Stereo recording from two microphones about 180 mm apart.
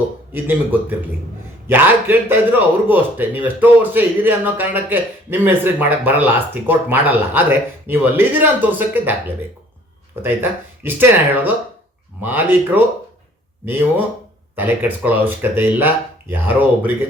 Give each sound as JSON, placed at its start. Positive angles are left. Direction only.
{"t": 0.3, "sound": "a man's voice", "side_deg": -10}
{"t": 10.8, "sound": "a man's voice", "side_deg": -10}